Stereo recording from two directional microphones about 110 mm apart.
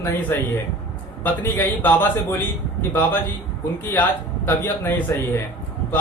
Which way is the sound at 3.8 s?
15° left (ahead or behind).